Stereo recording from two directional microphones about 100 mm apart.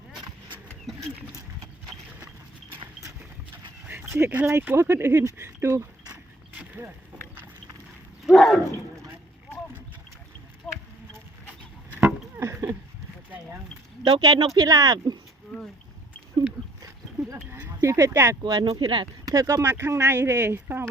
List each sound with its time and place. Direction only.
3.0 s clip-clop: 20° right (ahead or behind)
3.8 s speech: 20° right (ahead or behind)
6.5 s boat: 20° right (ahead or behind)
8.3 s roaring cats: centre (ahead or behind)
10.6 s a sound: centre (ahead or behind)
11.9 s a sound: 25° right (ahead or behind)
14.2 s speech: 40° right (ahead or behind)
17.7 s speech: 30° right (ahead or behind)
18.4 s speech: 45° right (ahead or behind)
18.8 s speech: 55° right (ahead or behind)
19.2 s speech: 35° right (ahead or behind); by 20.8 s 20° right (ahead or behind)